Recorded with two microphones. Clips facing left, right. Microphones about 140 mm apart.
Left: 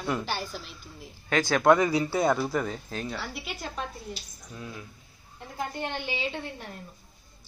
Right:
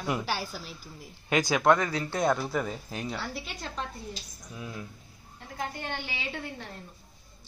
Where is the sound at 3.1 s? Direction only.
5° left (ahead or behind).